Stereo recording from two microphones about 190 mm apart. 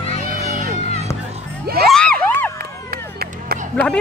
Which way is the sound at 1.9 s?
5° left (ahead or behind).